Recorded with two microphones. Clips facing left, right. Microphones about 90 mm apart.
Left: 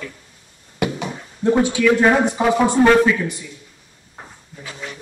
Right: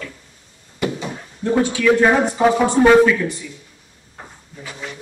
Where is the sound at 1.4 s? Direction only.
20° left (ahead or behind).